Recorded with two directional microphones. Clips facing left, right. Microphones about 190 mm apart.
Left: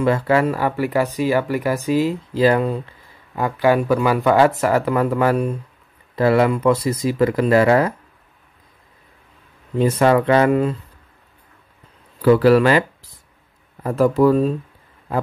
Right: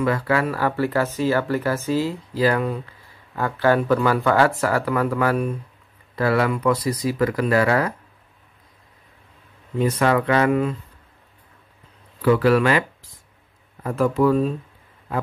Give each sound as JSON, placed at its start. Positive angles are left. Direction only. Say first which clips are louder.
{"t": 0.0, "sound": "speech", "louder": "left 4 dB", "side_deg": 25}
{"t": 9.8, "sound": "speech", "louder": "left 4 dB", "side_deg": 30}
{"t": 12.2, "sound": "speech", "louder": "left 4 dB", "side_deg": 35}
{"t": 13.8, "sound": "speech", "louder": "left 4 dB", "side_deg": 35}